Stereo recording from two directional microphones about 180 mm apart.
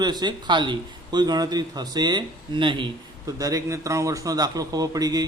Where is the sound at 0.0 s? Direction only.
25° right (ahead or behind).